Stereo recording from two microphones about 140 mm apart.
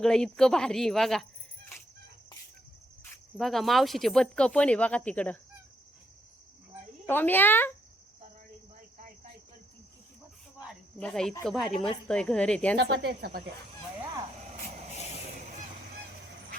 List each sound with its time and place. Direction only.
0.0 s speech: 5° left (ahead or behind)
3.3 s speech: centre (ahead or behind)
7.1 s a woman's voice: 15° left (ahead or behind)
11.0 s a woman's voice: 5° left (ahead or behind)
13.1 s speech: 90° right